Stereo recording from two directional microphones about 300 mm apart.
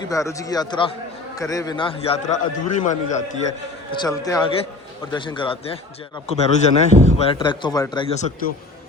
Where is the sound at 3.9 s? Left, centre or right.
Centre.